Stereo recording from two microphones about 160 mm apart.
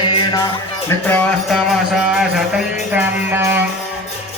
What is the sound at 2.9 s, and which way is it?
Music, 15° right (ahead or behind).